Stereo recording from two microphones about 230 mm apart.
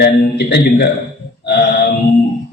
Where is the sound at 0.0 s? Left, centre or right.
Left.